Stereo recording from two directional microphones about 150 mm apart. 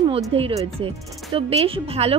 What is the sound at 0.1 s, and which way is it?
Speech, 40° right (ahead or behind).